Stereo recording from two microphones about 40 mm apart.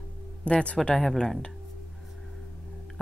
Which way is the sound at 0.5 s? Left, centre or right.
Left.